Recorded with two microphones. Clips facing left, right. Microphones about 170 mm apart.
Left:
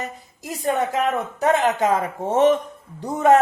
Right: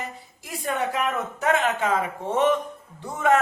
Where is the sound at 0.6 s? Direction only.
40° left (ahead or behind).